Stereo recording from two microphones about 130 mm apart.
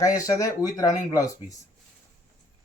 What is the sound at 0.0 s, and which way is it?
Speech, 25° left (ahead or behind).